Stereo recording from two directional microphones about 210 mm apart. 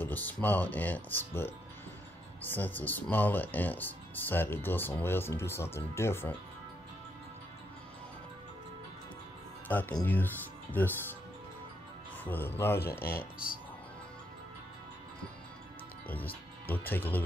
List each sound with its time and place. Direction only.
0.0 s speech: 10° left (ahead or behind)
9.7 s speech: 10° left (ahead or behind)
12.3 s speech: 10° left (ahead or behind)
13.0 s speech: 45° left (ahead or behind)
16.1 s speech: 10° left (ahead or behind)